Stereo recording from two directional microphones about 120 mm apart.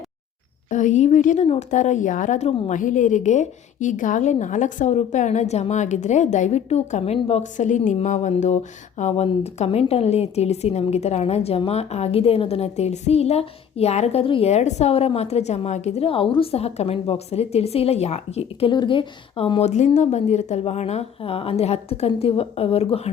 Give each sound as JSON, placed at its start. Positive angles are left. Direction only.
{"t": 0.7, "sound": "a woman's voice", "side_deg": 90}
{"t": 9.0, "sound": "a woman's voice", "side_deg": 65}
{"t": 14.5, "sound": "a woman's voice", "side_deg": 65}
{"t": 18.7, "sound": "a woman's voice", "side_deg": 40}